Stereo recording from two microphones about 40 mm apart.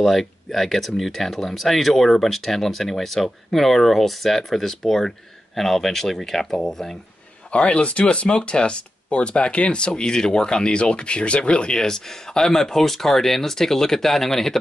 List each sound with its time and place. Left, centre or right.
0.0 s speech: centre
7.5 s speech: left
11.8 s speech: centre